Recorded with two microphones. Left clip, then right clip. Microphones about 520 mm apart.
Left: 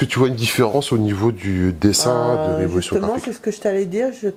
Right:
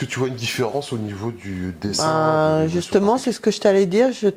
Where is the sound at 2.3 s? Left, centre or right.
Right.